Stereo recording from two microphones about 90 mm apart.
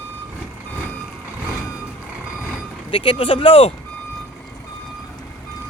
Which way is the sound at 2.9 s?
75° left (ahead or behind).